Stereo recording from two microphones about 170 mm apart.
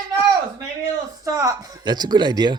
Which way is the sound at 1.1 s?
20° right (ahead or behind).